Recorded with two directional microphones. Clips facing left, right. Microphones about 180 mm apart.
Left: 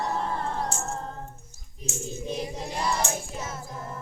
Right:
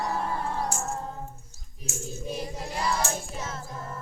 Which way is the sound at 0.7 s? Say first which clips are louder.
Right 1 dB; 10° right (ahead or behind).